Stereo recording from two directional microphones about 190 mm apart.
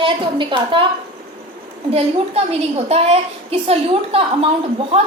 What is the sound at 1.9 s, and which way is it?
A woman's voice, 35° right (ahead or behind).